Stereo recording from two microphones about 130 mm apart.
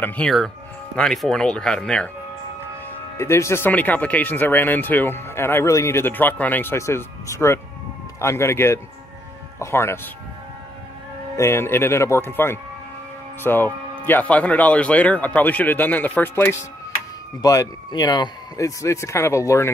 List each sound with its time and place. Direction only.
0.0 s speech: 10° left (ahead or behind)
3.2 s speech: 20° left (ahead or behind)
11.3 s speech: 20° left (ahead or behind)